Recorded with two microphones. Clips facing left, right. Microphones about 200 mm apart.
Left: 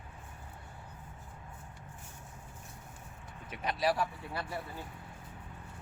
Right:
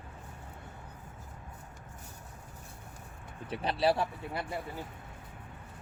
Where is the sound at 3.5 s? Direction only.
30° right (ahead or behind).